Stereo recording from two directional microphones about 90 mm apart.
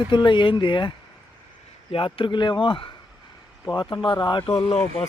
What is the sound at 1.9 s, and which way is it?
Speech, 90° left.